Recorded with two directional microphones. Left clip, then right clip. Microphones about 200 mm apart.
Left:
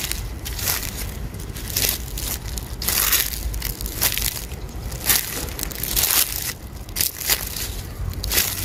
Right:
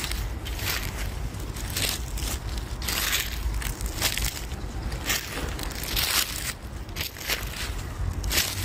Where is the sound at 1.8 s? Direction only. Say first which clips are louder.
Left 4 dB; 55° left (ahead or behind).